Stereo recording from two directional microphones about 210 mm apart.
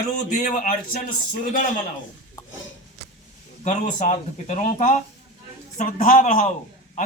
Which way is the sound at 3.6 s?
35° left (ahead or behind).